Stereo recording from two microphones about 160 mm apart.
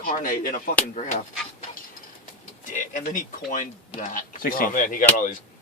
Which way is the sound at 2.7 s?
55° left (ahead or behind).